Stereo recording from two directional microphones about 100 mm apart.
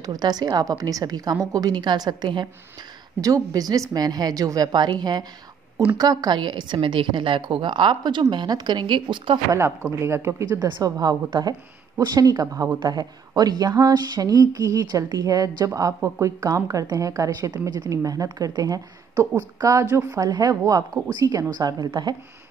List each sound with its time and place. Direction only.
0.0 s speech: 40° right (ahead or behind)
3.2 s a woman's voice: 35° right (ahead or behind); by 9.4 s 55° right (ahead or behind)
9.5 s speech: 25° right (ahead or behind)
10.6 s a woman's voice: 40° right (ahead or behind)
20.2 s speech: 40° right (ahead or behind)